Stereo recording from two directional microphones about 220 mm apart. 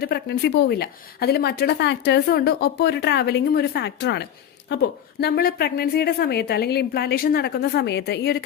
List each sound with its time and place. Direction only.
0.0 s a woman's voice: 45° left (ahead or behind)